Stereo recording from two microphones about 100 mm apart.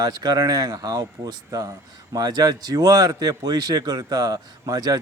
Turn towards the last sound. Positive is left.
turn(degrees=-35)  # may be behind; listen again after turning